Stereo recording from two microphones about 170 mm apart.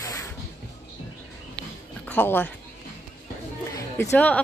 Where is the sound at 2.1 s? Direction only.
10° left (ahead or behind).